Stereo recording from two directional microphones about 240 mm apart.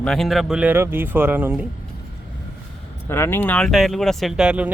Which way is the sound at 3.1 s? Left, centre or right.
Centre.